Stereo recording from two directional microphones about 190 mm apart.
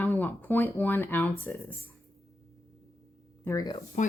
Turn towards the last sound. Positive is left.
turn(degrees=20)  # may be behind; listen again after turning